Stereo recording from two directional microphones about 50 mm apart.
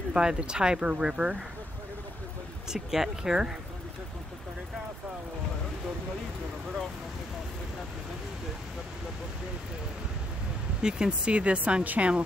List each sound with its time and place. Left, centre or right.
0.1 s speech: centre
2.7 s speech: centre
10.8 s speech: centre; by 12.1 s right